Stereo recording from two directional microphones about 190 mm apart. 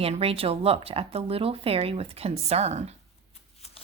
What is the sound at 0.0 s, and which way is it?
Speech, 30° right (ahead or behind).